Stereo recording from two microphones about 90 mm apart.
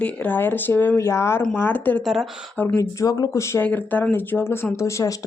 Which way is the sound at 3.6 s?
15° left (ahead or behind).